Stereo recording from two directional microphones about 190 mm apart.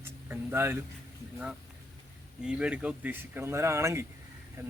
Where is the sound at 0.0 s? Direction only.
10° right (ahead or behind).